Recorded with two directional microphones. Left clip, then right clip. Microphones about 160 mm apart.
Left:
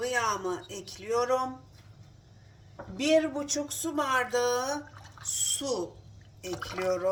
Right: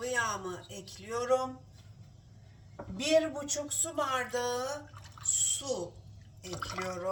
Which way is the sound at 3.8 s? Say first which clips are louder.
Left 4 dB; 65° left (ahead or behind).